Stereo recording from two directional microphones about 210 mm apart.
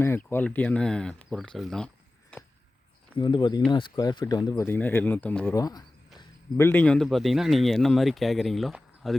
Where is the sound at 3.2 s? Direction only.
20° left (ahead or behind); by 5.6 s 5° left (ahead or behind).